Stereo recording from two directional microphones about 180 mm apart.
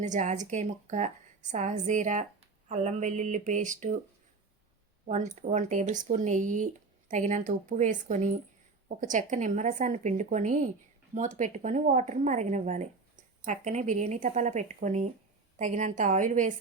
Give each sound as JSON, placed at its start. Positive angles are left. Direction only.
{"t": 0.0, "sound": "speech", "side_deg": -40}
{"t": 5.0, "sound": "speech", "side_deg": -40}